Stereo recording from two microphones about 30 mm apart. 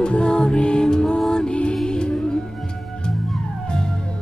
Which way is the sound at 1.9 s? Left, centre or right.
Left.